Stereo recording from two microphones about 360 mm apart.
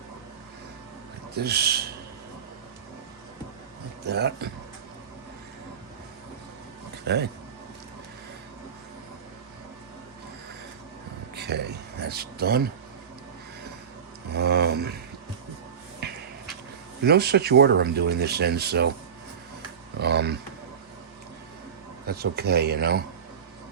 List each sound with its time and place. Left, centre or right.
1.4 s speech: right
4.0 s speech: right
7.0 s speech: right
11.3 s speech: right
14.3 s a sound: right
16.0 s a sound: right
17.0 s speech: right
20.0 s a sound: right
22.0 s speech: right